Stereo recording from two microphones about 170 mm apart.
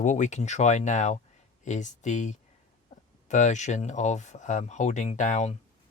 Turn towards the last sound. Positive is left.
turn(degrees=45)  # may be behind; listen again after turning